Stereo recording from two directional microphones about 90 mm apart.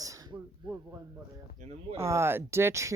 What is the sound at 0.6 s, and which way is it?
Speech, 65° right (ahead or behind).